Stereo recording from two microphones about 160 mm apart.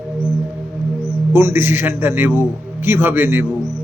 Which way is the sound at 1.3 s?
15° right (ahead or behind).